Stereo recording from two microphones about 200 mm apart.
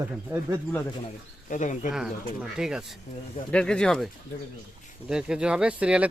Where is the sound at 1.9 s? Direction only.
Centre (ahead or behind).